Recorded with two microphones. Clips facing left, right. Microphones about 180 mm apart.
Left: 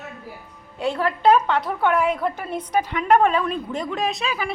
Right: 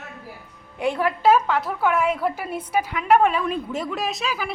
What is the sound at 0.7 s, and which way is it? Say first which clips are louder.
A woman's voice: even; 15° right (ahead or behind).